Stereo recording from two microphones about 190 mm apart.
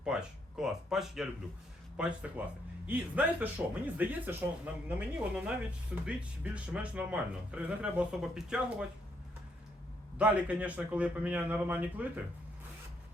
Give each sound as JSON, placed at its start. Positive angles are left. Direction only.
{"t": 0.0, "sound": "speech", "side_deg": -5}
{"t": 10.2, "sound": "speech", "side_deg": -5}